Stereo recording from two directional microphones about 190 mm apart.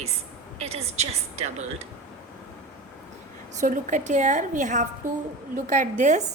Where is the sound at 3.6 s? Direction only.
40° right (ahead or behind).